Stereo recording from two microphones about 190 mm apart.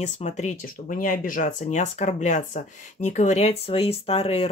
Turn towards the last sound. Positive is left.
turn(degrees=30)  # may be behind; listen again after turning